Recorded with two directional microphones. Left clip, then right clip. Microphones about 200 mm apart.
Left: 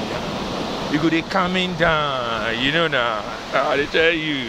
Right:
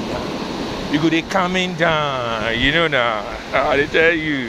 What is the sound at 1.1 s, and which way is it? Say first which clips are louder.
Speech: right 2 dB; 35° right (ahead or behind).